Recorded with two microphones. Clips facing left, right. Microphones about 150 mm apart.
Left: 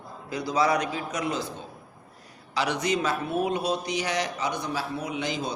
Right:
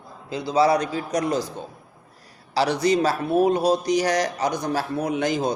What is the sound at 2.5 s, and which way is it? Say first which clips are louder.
A man's voice: right 6 dB; 35° right (ahead or behind).